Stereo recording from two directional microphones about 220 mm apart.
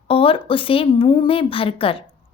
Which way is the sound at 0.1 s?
25° left (ahead or behind).